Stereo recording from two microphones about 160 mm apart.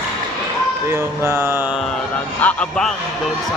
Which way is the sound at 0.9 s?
20° right (ahead or behind).